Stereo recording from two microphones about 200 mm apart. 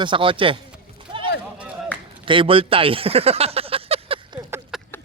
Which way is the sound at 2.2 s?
25° right (ahead or behind).